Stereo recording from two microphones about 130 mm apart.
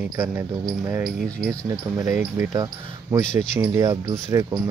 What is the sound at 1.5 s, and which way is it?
Speech, 25° right (ahead or behind).